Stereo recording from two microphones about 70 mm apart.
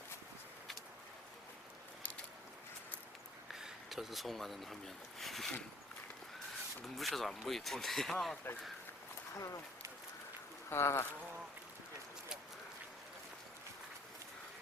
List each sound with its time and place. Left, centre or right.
3.5 s speech: centre
5.2 s a sound: centre
6.8 s speech: centre
10.7 s speech: left